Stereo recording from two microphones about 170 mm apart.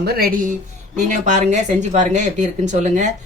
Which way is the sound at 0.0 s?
60° right (ahead or behind).